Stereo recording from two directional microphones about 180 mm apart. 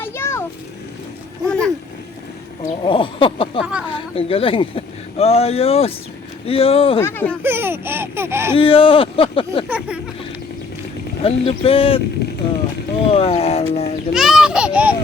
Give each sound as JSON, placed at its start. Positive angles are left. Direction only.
{"t": 0.0, "sound": "vehicle", "side_deg": 15}
{"t": 1.5, "sound": "a sound", "side_deg": 5}
{"t": 2.8, "sound": "a sound", "side_deg": 30}
{"t": 3.6, "sound": "speech", "side_deg": -5}
{"t": 4.1, "sound": "speech", "side_deg": 35}
{"t": 7.0, "sound": "speech", "side_deg": 10}
{"t": 7.4, "sound": "speech", "side_deg": -10}
{"t": 8.5, "sound": "speech", "side_deg": 30}
{"t": 9.6, "sound": "speech", "side_deg": -5}
{"t": 11.2, "sound": "speech", "side_deg": 35}
{"t": 12.4, "sound": "a sound", "side_deg": 30}
{"t": 13.1, "sound": "speech", "side_deg": 35}
{"t": 14.1, "sound": "speech", "side_deg": 0}